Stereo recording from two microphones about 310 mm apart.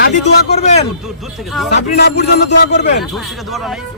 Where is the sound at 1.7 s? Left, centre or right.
Left.